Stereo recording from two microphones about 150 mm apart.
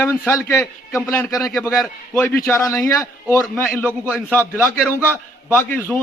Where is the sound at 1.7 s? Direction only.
Centre (ahead or behind).